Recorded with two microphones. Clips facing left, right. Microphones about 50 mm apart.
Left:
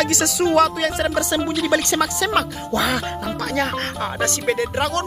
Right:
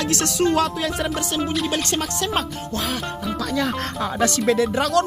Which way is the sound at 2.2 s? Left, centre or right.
Left.